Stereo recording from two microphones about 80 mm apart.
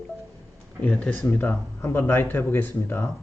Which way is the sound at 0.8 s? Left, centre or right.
Centre.